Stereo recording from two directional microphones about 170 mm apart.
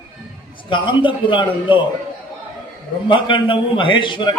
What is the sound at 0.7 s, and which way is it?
A man's voice, 30° left (ahead or behind).